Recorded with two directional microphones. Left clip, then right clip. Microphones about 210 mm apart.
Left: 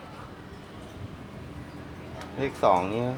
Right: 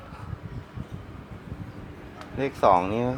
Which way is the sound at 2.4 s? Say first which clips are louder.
Right 2 dB; 45° right (ahead or behind).